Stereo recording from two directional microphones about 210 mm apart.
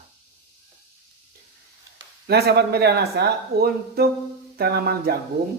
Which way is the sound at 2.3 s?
50° right (ahead or behind).